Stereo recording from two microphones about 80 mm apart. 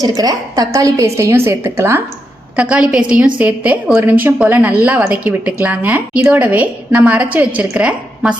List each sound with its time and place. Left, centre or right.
0.0 s a woman's voice: right
2.6 s a woman's voice: centre